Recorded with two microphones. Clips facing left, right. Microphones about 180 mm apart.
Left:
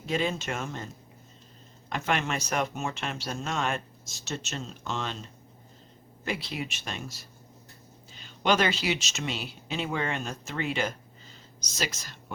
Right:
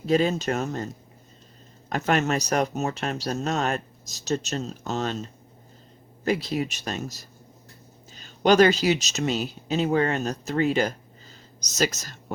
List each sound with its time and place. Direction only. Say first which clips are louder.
0.0 s speech: right 7 dB; 40° right (ahead or behind)
1.9 s speech: right 6 dB; 40° right (ahead or behind)
6.2 s speech: right 8 dB; 40° right (ahead or behind)